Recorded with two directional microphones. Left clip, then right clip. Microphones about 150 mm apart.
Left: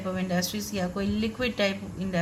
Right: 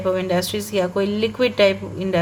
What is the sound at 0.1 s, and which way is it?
A woman's voice, 45° right (ahead or behind).